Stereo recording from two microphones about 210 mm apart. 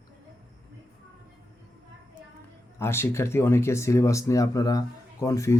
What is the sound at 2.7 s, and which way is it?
Speech, 10° left (ahead or behind).